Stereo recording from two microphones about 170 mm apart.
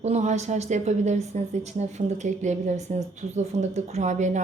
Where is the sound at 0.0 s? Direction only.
40° right (ahead or behind).